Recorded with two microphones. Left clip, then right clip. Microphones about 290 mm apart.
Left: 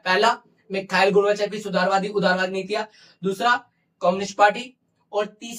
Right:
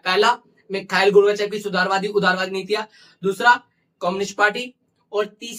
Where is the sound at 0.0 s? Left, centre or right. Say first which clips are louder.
Right 2 dB; centre.